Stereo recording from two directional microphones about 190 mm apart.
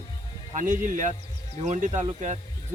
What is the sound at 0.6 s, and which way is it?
Speech, 45° right (ahead or behind).